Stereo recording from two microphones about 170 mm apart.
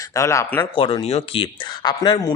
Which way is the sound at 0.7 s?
30° left (ahead or behind).